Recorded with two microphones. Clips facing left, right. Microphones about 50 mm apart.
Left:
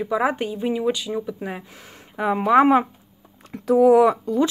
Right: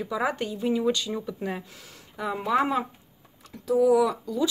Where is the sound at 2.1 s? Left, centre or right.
Left.